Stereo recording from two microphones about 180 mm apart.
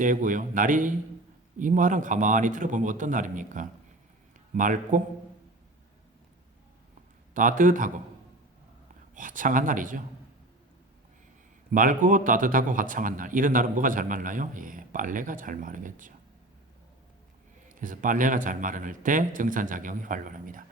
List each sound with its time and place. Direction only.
0.0 s a man's voice: 45° right (ahead or behind)
7.3 s a man's voice: 45° right (ahead or behind)
9.1 s a man's voice: 45° right (ahead or behind)
11.7 s a man's voice: 45° right (ahead or behind)
17.7 s a man's voice: 45° right (ahead or behind)